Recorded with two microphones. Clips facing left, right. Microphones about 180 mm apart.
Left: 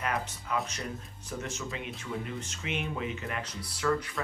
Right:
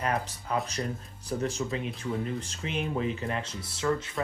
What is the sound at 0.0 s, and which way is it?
Speech, 35° right (ahead or behind).